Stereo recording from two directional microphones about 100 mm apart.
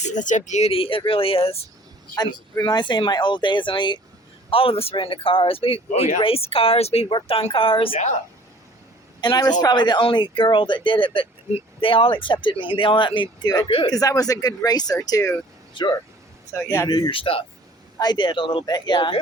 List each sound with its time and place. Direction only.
0.6 s speech: 70° left (ahead or behind)
2.1 s speech: 40° left (ahead or behind)
4.5 s speech: 70° left (ahead or behind); by 7.1 s 90° left
7.1 s speech: 70° left (ahead or behind)
9.2 s speech: 45° left (ahead or behind)
15.8 s speech: 55° left (ahead or behind)
16.6 s speech: 25° left (ahead or behind)
17.1 s speech: 65° left (ahead or behind)
18.0 s speech: 50° left (ahead or behind)
18.6 s speech: 45° left (ahead or behind)